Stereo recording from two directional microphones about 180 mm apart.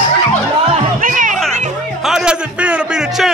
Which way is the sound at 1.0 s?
50° right (ahead or behind).